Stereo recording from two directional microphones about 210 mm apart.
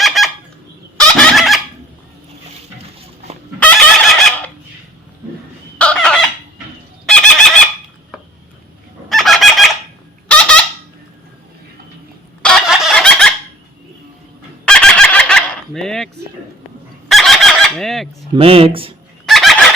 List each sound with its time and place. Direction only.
0.0 s fowl: centre (ahead or behind)
3.6 s fowl: centre (ahead or behind)
5.7 s fowl: 5° left (ahead or behind)
9.0 s fowl: centre (ahead or behind)
10.2 s a sound: 5° left (ahead or behind)
12.4 s a sound: 5° left (ahead or behind)
14.6 s fowl: 5° left (ahead or behind)
17.1 s fowl: centre (ahead or behind)
18.3 s speech: 25° right (ahead or behind)
19.2 s fowl: centre (ahead or behind)